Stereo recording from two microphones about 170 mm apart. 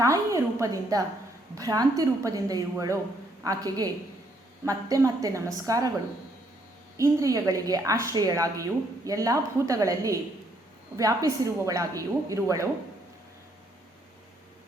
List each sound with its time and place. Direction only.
0.0 s a woman's voice: 20° right (ahead or behind)
6.9 s a woman's voice: 20° right (ahead or behind)